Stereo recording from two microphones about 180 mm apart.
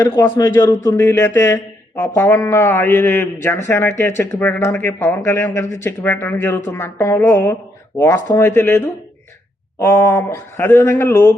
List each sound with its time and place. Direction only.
0.0 s speech: 15° left (ahead or behind)